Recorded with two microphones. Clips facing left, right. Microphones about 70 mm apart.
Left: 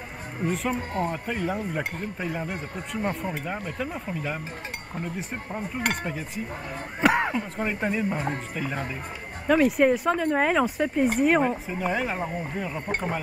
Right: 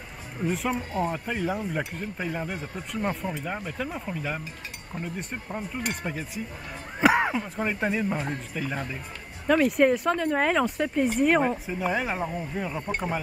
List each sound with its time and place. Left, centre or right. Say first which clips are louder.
0.5 s speech: even; centre